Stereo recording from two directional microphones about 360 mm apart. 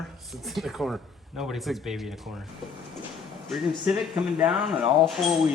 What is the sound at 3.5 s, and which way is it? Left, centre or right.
Speech, centre.